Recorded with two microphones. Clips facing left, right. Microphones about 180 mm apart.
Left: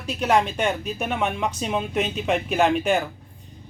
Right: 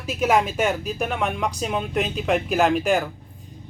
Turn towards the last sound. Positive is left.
turn(degrees=0)  # may be behind; listen again after turning